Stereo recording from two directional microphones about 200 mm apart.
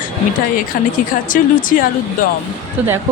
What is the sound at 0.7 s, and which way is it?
Speech, 45° left (ahead or behind).